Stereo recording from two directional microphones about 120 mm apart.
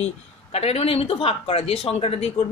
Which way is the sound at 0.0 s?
60° left (ahead or behind).